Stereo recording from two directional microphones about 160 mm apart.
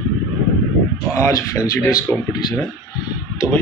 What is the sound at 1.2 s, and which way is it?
Speech, 20° left (ahead or behind).